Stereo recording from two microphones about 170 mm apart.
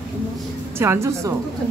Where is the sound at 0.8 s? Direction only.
15° right (ahead or behind).